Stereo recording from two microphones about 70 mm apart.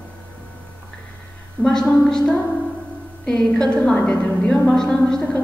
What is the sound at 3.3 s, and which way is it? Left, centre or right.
A woman's voice, centre.